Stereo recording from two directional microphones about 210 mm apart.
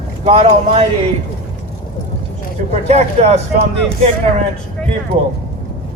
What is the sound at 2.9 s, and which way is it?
Speech, 30° right (ahead or behind).